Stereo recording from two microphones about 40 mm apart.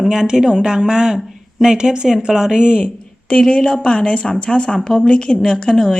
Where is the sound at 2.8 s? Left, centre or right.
Left.